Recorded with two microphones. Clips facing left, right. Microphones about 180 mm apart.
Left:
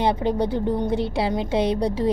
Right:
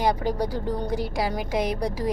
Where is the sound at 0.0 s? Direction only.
25° left (ahead or behind).